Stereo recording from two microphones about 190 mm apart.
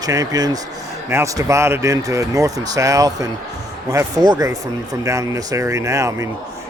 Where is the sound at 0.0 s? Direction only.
20° right (ahead or behind).